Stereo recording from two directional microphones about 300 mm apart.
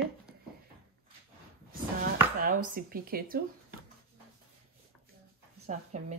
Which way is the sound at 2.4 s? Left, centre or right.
Right.